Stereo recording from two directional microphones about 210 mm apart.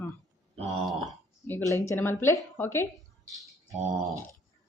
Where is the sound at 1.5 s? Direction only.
10° left (ahead or behind).